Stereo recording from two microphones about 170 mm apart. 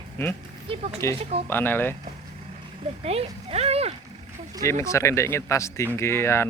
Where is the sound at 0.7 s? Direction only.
30° right (ahead or behind).